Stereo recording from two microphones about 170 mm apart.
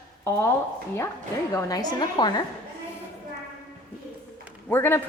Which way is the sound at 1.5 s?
20° left (ahead or behind).